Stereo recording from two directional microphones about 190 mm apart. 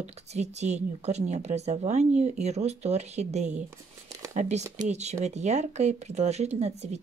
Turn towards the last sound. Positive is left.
turn(degrees=-35)  # may be behind; listen again after turning